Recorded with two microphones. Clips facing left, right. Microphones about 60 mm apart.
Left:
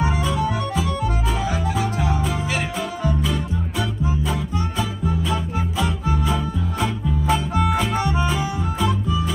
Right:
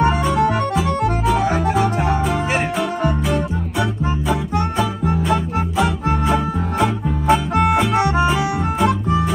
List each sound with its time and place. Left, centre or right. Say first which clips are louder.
1.3 s music: right 7 dB; right
5.0 s music: right 5 dB; right
7.5 s music: right 5 dB; right